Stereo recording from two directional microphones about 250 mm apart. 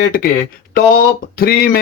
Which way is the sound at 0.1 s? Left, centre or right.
Left.